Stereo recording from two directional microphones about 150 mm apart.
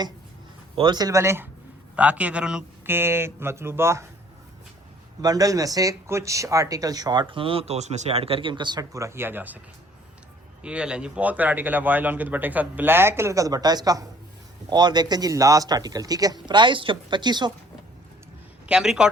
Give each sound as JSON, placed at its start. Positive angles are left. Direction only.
{"t": 0.8, "sound": "speech", "side_deg": -30}
{"t": 5.2, "sound": "speech", "side_deg": -25}
{"t": 10.6, "sound": "speech", "side_deg": -5}
{"t": 18.7, "sound": "speech", "side_deg": -5}